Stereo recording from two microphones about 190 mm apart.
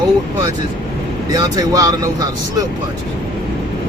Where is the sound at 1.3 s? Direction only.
20° right (ahead or behind).